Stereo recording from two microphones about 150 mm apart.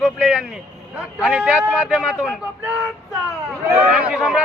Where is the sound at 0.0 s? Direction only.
Centre (ahead or behind).